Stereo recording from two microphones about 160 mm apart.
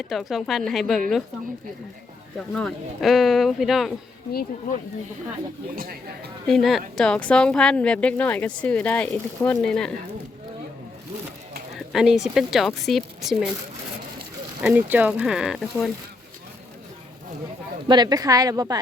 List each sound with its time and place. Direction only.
0.0 s a woman's voice: centre (ahead or behind)
2.5 s a woman's voice: 5° left (ahead or behind)
4.3 s speech: 70° left (ahead or behind)
5.7 s speech: 65° right (ahead or behind)
6.5 s a woman's voice: centre (ahead or behind)
11.9 s a woman's voice: centre (ahead or behind)
14.6 s speech: 10° right (ahead or behind)
17.8 s speech: 25° right (ahead or behind)